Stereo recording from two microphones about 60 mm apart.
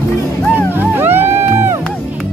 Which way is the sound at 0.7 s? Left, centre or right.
Right.